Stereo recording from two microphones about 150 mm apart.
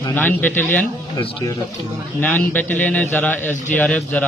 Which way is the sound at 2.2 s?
10° left (ahead or behind).